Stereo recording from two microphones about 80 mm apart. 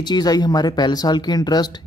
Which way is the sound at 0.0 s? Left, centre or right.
Left.